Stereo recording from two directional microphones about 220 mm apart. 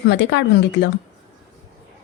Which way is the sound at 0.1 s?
55° left (ahead or behind).